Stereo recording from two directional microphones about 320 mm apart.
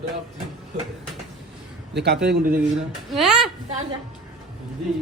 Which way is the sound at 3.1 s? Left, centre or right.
Centre.